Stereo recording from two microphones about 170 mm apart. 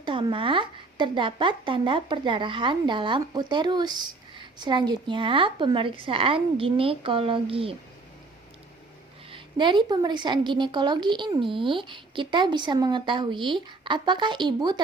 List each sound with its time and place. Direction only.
0.0 s speech: 30° right (ahead or behind)
9.3 s speech: 30° right (ahead or behind)